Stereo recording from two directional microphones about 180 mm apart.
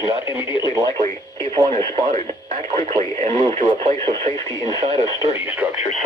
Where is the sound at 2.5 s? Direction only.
40° right (ahead or behind).